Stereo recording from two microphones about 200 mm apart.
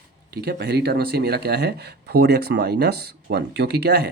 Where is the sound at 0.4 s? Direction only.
55° right (ahead or behind).